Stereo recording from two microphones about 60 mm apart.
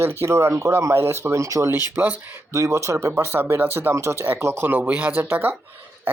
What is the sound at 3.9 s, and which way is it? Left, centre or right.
Speech, right.